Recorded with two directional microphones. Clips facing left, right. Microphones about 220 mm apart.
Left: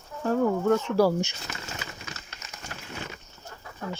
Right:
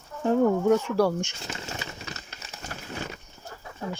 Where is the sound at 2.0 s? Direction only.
35° right (ahead or behind).